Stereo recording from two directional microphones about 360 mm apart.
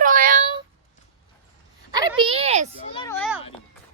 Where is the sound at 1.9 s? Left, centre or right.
Centre.